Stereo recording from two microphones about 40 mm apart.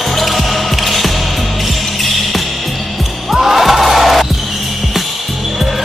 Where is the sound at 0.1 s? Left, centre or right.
Centre.